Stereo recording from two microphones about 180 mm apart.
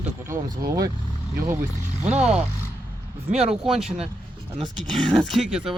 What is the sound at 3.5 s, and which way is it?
Speech, centre (ahead or behind).